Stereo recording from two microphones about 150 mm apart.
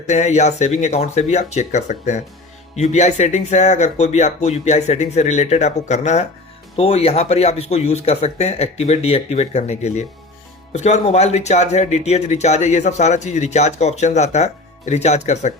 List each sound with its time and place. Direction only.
0.1 s speech: 50° left (ahead or behind)